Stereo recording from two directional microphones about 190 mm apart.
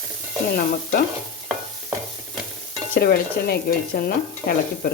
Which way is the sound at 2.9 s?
50° left (ahead or behind).